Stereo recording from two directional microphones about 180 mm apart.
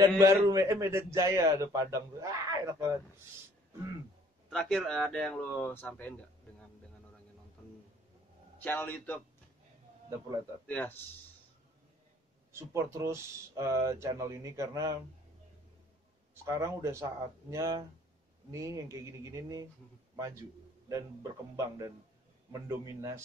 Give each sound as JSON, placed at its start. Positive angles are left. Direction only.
{"t": 0.0, "sound": "a man's voice", "side_deg": -15}
{"t": 4.5, "sound": "speech", "side_deg": 5}
{"t": 8.5, "sound": "a man's voice", "side_deg": 10}
{"t": 10.7, "sound": "a man's voice", "side_deg": 10}
{"t": 12.5, "sound": "a man's voice", "side_deg": -15}
{"t": 16.4, "sound": "a man's voice", "side_deg": -15}
{"t": 20.9, "sound": "a man's voice", "side_deg": -20}